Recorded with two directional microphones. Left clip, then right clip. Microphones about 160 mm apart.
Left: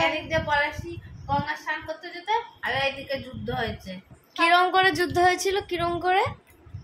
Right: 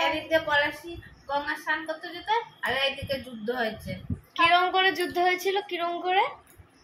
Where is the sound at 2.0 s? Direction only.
25° left (ahead or behind).